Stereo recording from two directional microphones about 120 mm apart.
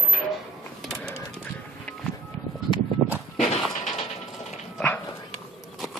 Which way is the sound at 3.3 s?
60° left (ahead or behind).